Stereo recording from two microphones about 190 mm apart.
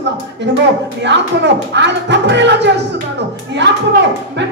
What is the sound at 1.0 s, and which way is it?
A child's voice, 65° right (ahead or behind).